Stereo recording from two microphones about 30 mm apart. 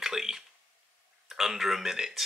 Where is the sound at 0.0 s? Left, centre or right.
Centre.